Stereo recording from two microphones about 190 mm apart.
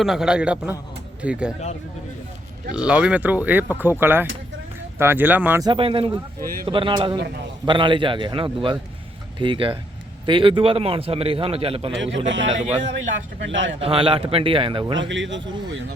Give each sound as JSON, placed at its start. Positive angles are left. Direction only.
{"t": 0.0, "sound": "a man's voice", "side_deg": 0}
{"t": 2.7, "sound": "speech", "side_deg": -5}
{"t": 5.6, "sound": "a man's voice", "side_deg": -25}
{"t": 6.4, "sound": "speech", "side_deg": -50}
{"t": 6.7, "sound": "a man's voice", "side_deg": -25}
{"t": 7.2, "sound": "a man's voice", "side_deg": -60}
{"t": 7.6, "sound": "a man's voice", "side_deg": -25}
{"t": 12.1, "sound": "speech", "side_deg": -75}
{"t": 13.7, "sound": "a man's voice", "side_deg": -30}
{"t": 14.9, "sound": "speech", "side_deg": -75}